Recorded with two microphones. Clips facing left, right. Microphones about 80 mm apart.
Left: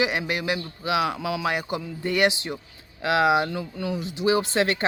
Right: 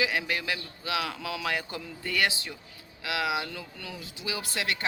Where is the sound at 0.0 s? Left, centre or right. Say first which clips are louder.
Left 4 dB; left.